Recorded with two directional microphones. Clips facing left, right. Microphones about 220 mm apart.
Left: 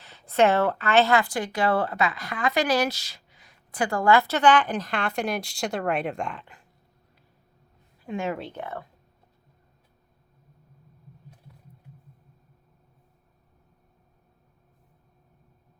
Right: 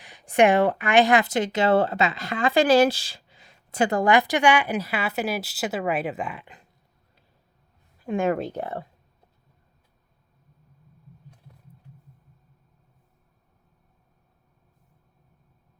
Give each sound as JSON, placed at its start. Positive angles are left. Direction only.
{"t": 0.0, "sound": "speech", "side_deg": -15}
{"t": 8.0, "sound": "speech", "side_deg": -50}